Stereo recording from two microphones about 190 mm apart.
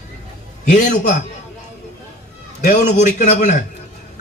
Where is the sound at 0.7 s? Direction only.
40° left (ahead or behind).